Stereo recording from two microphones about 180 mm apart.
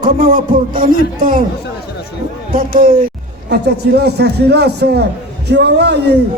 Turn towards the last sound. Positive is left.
turn(degrees=-65)  # may be behind; listen again after turning